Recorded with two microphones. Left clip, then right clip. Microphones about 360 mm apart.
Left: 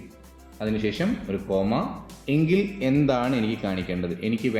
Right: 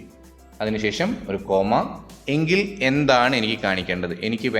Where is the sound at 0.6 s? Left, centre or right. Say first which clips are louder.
Right 4 dB; right.